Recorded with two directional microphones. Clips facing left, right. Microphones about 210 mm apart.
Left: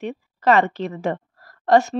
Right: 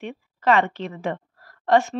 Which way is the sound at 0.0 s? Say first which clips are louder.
Left 3 dB; 40° left (ahead or behind).